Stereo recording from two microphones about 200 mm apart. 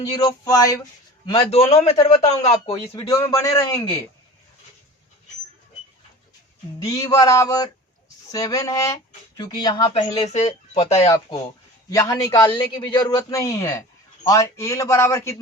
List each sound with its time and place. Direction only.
0.0 s speech: 15° left (ahead or behind)
1.3 s speech: 30° left (ahead or behind)
3.1 s speech: 15° left (ahead or behind)
6.8 s speech: 15° left (ahead or behind)
10.2 s speech: 35° left (ahead or behind)
11.9 s speech: 15° left (ahead or behind)